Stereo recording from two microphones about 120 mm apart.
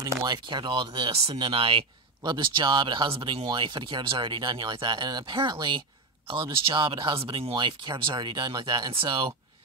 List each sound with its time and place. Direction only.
0.0 s speech: 35° right (ahead or behind)